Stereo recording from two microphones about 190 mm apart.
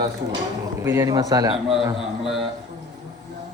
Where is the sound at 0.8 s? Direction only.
15° right (ahead or behind).